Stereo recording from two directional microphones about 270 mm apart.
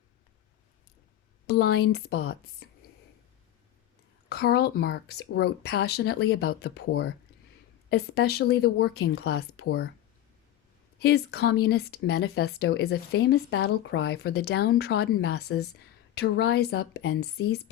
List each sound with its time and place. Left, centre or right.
1.5 s speech: left
4.3 s speech: left
11.0 s speech: left